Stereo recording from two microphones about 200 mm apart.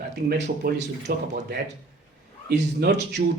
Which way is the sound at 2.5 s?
60° right (ahead or behind).